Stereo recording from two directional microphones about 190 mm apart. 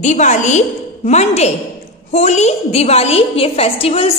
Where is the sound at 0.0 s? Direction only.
40° left (ahead or behind).